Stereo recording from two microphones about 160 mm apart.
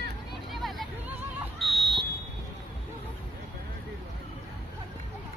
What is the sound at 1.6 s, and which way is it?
Buzzer, centre (ahead or behind).